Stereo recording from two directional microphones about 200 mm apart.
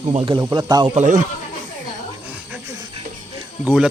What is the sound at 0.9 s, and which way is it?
Speech, 40° right (ahead or behind).